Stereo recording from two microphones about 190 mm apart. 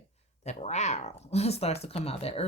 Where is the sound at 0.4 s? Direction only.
35° left (ahead or behind).